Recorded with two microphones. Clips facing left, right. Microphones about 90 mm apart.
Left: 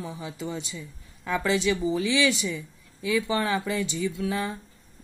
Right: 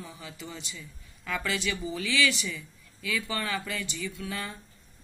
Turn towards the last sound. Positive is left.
turn(degrees=20)  # may be behind; listen again after turning